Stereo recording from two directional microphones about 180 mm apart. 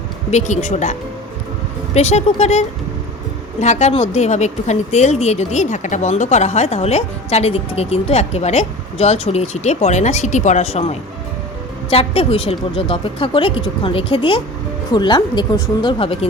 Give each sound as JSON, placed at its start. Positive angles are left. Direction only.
{"t": 0.3, "sound": "speech", "side_deg": 40}